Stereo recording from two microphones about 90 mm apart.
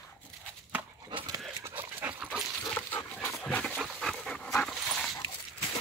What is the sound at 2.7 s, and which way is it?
Dog, 20° left (ahead or behind).